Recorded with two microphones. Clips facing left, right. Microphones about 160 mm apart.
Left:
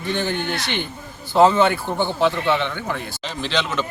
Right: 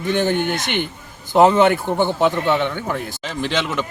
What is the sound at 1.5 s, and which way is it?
Speech, 55° right (ahead or behind).